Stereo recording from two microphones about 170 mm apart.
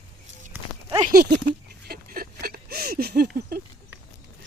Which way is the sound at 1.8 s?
65° right (ahead or behind).